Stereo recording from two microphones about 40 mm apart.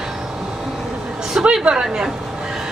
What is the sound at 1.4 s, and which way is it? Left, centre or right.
Speech, right.